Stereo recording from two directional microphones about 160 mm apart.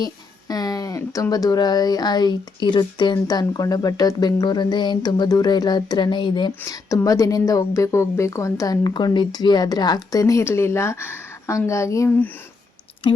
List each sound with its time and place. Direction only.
0.0 s speech: 25° left (ahead or behind)